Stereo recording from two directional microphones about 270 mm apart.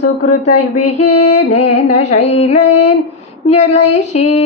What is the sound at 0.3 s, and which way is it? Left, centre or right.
Speech, left.